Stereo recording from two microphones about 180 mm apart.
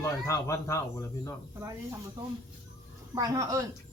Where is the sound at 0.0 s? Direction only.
15° left (ahead or behind).